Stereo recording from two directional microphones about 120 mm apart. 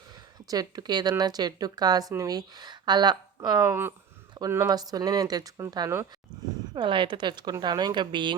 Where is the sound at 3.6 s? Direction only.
20° right (ahead or behind).